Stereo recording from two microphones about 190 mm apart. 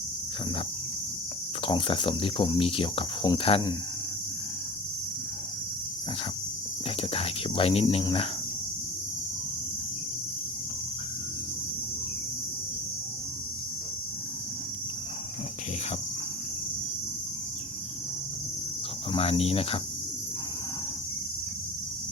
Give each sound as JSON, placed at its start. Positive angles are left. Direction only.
{"t": 1.6, "sound": "cricket", "side_deg": 25}
{"t": 7.1, "sound": "speech", "side_deg": 30}
{"t": 19.1, "sound": "speech", "side_deg": 30}